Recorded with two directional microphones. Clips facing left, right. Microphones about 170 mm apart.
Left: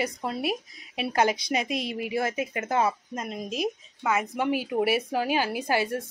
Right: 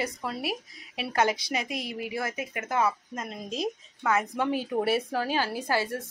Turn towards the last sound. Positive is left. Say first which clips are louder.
# left 2 dB
turn(degrees=15)  # may be behind; listen again after turning